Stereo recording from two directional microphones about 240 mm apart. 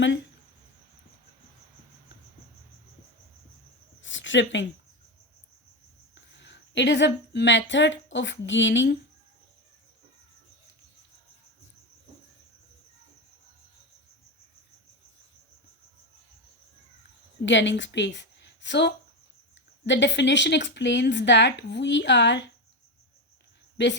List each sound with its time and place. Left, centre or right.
4.0 s a sound: left
6.4 s speech: left
17.4 s a woman's voice: left
23.7 s speech: left